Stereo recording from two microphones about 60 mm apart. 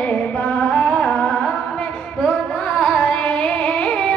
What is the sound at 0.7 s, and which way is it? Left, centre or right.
Music, centre.